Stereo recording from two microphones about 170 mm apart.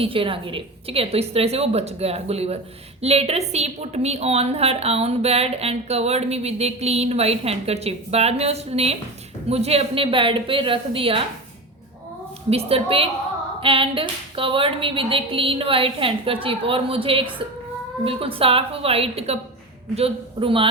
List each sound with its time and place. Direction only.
0.0 s a woman's voice: 30° right (ahead or behind)
12.5 s a woman's voice: 35° right (ahead or behind)